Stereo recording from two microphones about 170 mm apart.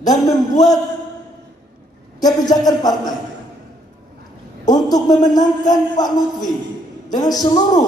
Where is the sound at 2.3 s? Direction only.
20° left (ahead or behind).